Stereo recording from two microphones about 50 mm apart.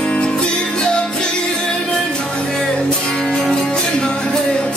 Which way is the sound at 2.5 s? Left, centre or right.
Centre.